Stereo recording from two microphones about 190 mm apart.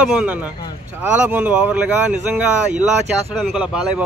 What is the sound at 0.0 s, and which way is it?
A man's voice, 5° right (ahead or behind).